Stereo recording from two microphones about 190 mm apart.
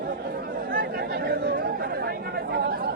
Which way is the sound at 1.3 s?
65° right (ahead or behind).